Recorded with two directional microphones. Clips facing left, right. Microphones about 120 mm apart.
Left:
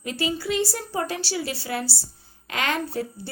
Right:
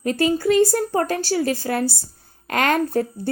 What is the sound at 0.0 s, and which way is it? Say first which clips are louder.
A woman's voice: right 8 dB; 45° right (ahead or behind).